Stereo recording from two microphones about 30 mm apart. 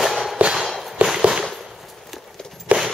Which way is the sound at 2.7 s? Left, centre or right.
Right.